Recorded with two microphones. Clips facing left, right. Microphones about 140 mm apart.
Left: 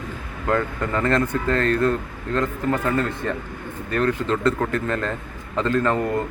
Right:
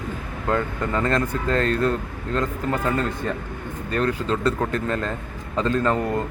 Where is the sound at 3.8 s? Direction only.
30° right (ahead or behind).